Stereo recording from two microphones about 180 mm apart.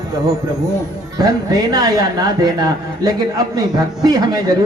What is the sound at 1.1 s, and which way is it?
A man's voice, 20° right (ahead or behind).